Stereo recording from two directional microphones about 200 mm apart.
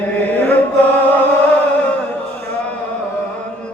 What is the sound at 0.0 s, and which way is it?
Chant, 10° left (ahead or behind).